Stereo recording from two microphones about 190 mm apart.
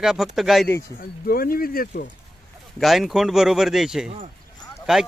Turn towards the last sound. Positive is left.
turn(degrees=-5)  # may be behind; listen again after turning